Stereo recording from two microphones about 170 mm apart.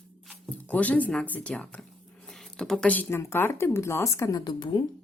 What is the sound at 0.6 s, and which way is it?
Speech, 10° left (ahead or behind).